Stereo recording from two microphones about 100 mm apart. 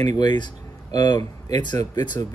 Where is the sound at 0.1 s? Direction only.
45° left (ahead or behind).